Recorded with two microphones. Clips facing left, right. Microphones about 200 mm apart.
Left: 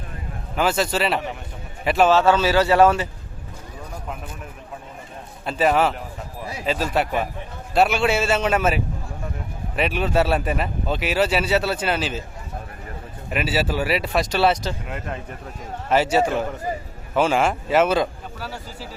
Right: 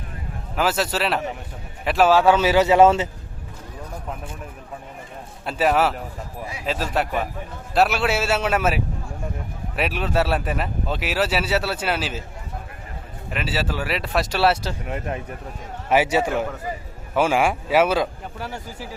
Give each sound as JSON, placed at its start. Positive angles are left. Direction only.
{"t": 0.5, "sound": "a man's voice", "side_deg": -5}
{"t": 5.5, "sound": "speech", "side_deg": -5}
{"t": 13.3, "sound": "a man's voice", "side_deg": 10}
{"t": 18.3, "sound": "speech", "side_deg": -20}